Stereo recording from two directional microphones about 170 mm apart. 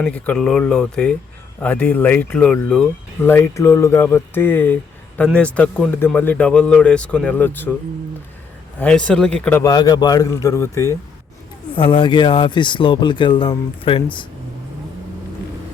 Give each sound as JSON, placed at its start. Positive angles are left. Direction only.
{"t": 0.0, "sound": "speech", "side_deg": 5}
{"t": 8.8, "sound": "speech", "side_deg": 5}
{"t": 9.6, "sound": "speech", "side_deg": 25}
{"t": 11.7, "sound": "speech", "side_deg": 30}